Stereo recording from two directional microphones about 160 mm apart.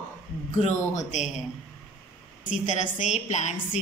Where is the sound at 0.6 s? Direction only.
50° left (ahead or behind).